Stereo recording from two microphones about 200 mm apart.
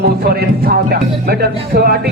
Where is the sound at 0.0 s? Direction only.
50° right (ahead or behind).